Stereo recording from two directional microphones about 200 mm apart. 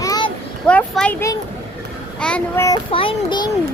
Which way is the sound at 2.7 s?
25° left (ahead or behind).